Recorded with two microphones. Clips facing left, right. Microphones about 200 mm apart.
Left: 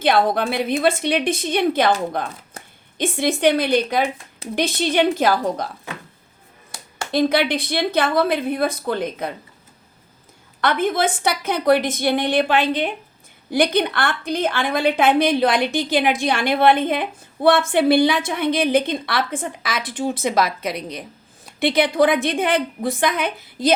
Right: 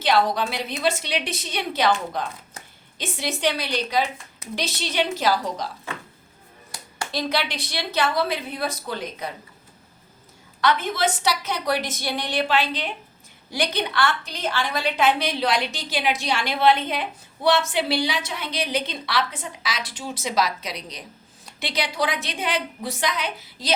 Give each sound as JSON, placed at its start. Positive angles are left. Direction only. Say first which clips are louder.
{"t": 0.0, "sound": "a woman's voice", "louder": "left 3 dB", "side_deg": 55}
{"t": 7.1, "sound": "a woman's voice", "louder": "left 9 dB", "side_deg": 55}
{"t": 10.6, "sound": "a woman's voice", "louder": "left 3 dB", "side_deg": 55}